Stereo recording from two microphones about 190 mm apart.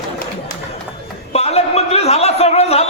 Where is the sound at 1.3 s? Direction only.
35° left (ahead or behind).